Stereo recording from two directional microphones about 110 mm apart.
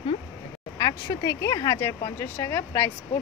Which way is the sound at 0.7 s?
35° left (ahead or behind).